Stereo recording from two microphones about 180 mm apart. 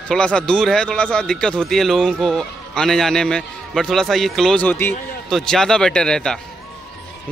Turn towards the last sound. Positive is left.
turn(degrees=5)  # may be behind; listen again after turning